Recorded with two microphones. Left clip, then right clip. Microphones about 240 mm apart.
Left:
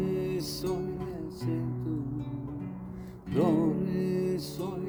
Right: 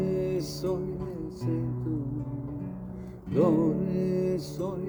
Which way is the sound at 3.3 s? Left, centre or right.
Centre.